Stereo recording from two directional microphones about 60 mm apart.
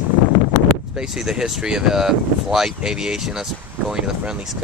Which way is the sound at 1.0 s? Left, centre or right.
Centre.